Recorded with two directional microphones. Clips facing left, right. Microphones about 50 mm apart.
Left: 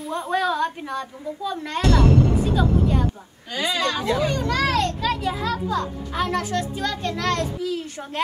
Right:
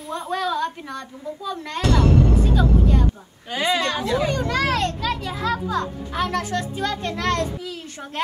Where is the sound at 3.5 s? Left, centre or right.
Centre.